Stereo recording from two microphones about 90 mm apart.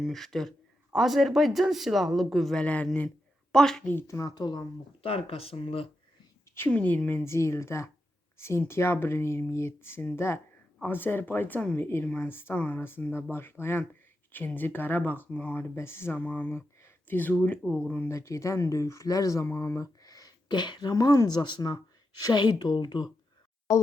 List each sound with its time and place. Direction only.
0.0 s speech: centre (ahead or behind)
2.6 s speech: 15° left (ahead or behind)
4.0 s speech: 35° left (ahead or behind)
5.0 s speech: 90° left
6.7 s speech: 15° left (ahead or behind)
7.3 s speech: 30° left (ahead or behind); by 11.8 s 15° left (ahead or behind)
11.8 s speech: 30° left (ahead or behind)
12.0 s speech: 20° left (ahead or behind)
18.1 s speech: 35° left (ahead or behind); by 23.0 s 55° left (ahead or behind)